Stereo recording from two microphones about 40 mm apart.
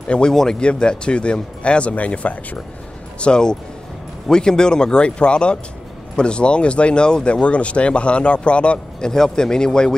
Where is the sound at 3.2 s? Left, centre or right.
Left.